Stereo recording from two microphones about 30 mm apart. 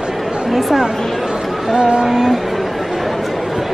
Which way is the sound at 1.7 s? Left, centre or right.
Right.